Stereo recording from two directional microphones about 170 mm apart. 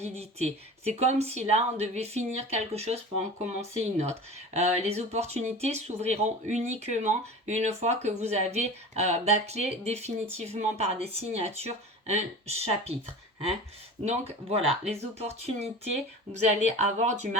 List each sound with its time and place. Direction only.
0.0 s speech: 40° right (ahead or behind)
4.5 s speech: 40° right (ahead or behind)
14.0 s speech: 40° right (ahead or behind)